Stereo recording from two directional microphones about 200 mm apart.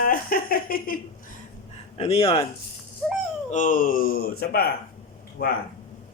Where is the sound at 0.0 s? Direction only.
45° left (ahead or behind).